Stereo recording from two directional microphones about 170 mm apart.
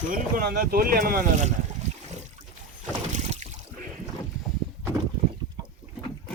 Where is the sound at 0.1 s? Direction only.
55° right (ahead or behind).